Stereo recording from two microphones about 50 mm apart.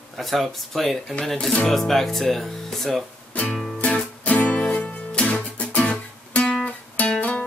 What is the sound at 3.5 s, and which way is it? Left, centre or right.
Music, centre.